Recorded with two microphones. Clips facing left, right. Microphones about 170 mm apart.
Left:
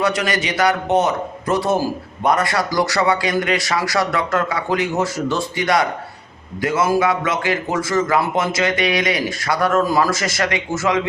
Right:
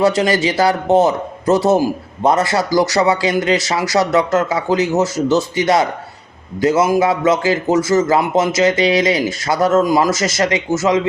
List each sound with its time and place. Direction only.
0.0 s a man's voice: 25° right (ahead or behind)